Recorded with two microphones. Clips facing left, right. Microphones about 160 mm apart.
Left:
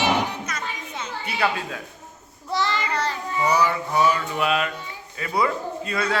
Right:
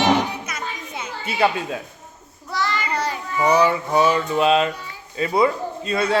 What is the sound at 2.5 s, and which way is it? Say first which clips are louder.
Child singing: even; 25° left (ahead or behind).